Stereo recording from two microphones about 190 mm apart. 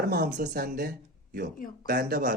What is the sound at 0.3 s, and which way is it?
Speech, 55° right (ahead or behind).